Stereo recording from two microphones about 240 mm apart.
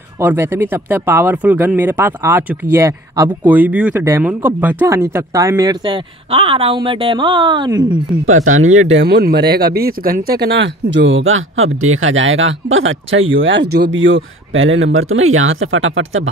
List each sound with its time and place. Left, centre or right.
0.2 s speech: centre
8.7 s speech: right